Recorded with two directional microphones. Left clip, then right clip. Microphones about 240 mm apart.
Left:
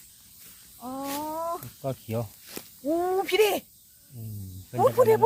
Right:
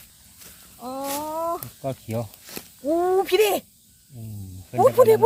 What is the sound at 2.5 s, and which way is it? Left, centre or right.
Speech, centre.